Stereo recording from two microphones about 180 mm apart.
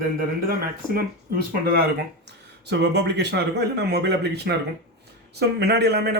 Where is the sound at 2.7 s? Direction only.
70° right (ahead or behind).